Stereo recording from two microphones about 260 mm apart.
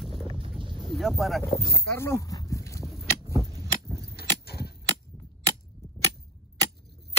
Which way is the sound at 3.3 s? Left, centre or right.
Centre.